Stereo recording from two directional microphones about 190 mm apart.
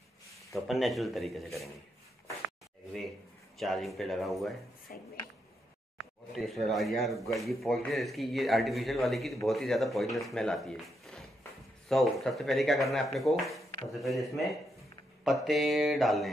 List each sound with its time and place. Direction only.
0.5 s speech: centre (ahead or behind)
3.5 s speech: centre (ahead or behind)
4.9 s speech: 50° left (ahead or behind)
5.9 s speech: centre (ahead or behind)